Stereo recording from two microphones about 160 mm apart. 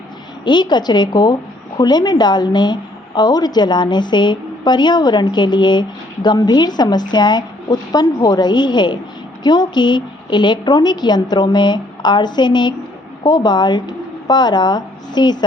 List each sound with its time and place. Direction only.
0.4 s a woman's voice: 30° left (ahead or behind)